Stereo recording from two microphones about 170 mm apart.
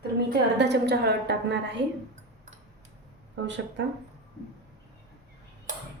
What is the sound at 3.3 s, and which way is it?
Speech, 90° right.